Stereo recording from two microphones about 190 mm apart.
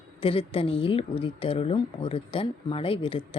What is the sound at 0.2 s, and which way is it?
Speech, 30° left (ahead or behind).